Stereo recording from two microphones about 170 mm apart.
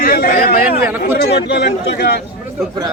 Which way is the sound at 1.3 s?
80° left.